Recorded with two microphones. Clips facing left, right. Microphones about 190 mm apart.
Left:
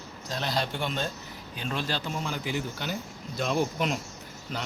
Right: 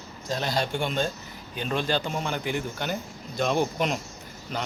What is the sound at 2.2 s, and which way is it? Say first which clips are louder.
Speech: right 3 dB; 60° right (ahead or behind).